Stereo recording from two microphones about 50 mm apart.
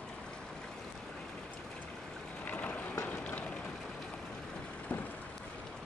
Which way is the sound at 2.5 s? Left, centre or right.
Left.